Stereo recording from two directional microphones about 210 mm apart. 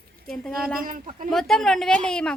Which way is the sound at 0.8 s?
40° right (ahead or behind).